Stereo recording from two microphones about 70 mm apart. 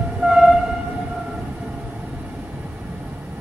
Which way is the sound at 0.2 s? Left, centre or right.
Centre.